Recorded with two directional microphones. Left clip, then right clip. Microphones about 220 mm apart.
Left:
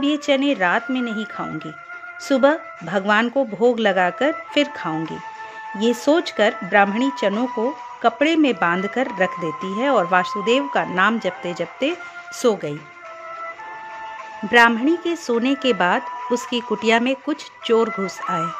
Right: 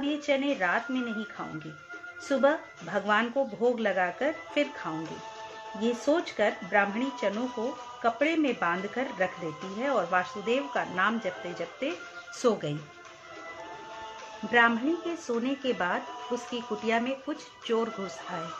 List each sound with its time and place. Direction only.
0.0 s a woman's voice: 50° left (ahead or behind)
12.4 s speech: 35° left (ahead or behind)
14.5 s a woman's voice: 45° left (ahead or behind)